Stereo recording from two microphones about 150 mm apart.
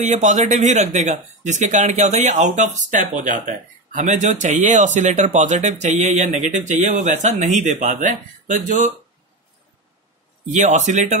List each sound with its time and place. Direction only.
0.0 s speech: 55° right (ahead or behind)
10.5 s speech: 55° right (ahead or behind)